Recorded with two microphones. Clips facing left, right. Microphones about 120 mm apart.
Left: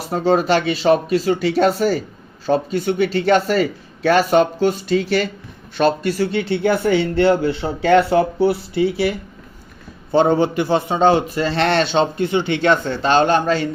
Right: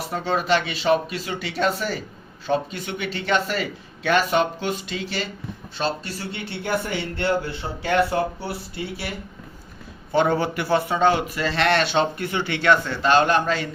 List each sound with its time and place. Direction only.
0.1 s speech: 40° left (ahead or behind)
5.7 s speech: 60° left (ahead or behind); by 9.0 s 90° left
10.1 s a man's voice: 30° left (ahead or behind)